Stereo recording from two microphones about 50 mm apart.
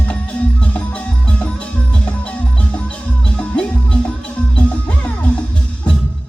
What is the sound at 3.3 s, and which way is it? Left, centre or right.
Music, left.